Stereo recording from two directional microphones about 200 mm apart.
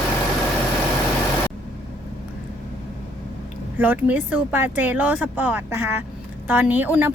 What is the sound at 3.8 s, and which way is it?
A woman's voice, 10° right (ahead or behind).